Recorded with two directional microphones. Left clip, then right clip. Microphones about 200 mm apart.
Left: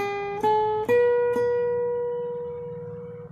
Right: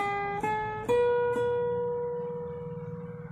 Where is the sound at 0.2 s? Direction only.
25° left (ahead or behind).